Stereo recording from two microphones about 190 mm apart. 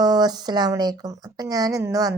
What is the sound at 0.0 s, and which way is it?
Speech, 20° right (ahead or behind).